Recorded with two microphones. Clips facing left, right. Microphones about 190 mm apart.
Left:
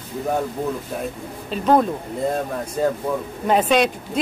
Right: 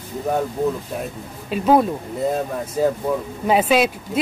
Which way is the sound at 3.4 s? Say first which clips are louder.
Right 1 dB; 5° right (ahead or behind).